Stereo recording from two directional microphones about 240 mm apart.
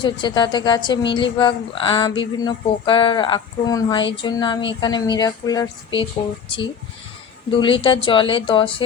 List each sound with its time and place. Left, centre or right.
0.0 s a woman's voice: centre
7.6 s a woman's voice: left